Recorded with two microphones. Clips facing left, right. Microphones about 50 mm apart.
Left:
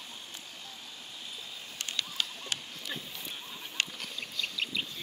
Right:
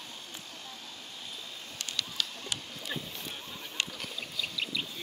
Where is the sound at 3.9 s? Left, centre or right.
Centre.